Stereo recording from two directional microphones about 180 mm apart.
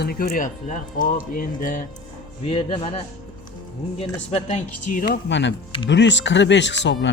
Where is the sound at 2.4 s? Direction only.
30° left (ahead or behind).